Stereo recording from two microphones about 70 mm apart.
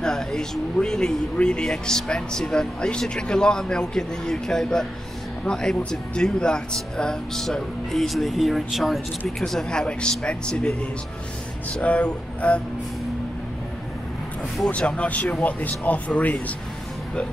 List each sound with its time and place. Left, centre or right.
0.0 s speech: centre
11.8 s speech: centre
14.7 s speech: centre